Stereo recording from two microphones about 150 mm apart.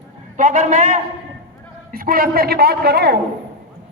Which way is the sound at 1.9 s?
80° right.